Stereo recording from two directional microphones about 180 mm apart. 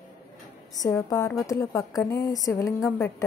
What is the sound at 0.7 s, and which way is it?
A woman's voice, 20° left (ahead or behind).